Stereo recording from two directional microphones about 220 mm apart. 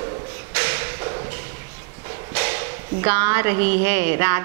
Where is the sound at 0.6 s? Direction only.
15° right (ahead or behind).